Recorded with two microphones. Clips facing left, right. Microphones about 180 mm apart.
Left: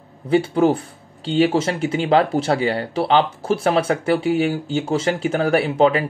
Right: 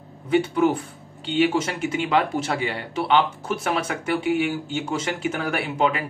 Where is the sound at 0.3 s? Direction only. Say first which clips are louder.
Left 3 dB; 30° left (ahead or behind).